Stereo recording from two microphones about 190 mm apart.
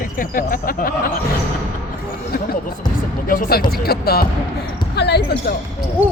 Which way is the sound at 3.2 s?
50° left (ahead or behind).